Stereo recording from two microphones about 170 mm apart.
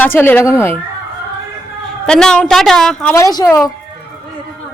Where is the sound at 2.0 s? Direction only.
5° left (ahead or behind).